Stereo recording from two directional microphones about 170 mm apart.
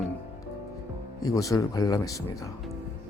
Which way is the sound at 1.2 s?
20° left (ahead or behind).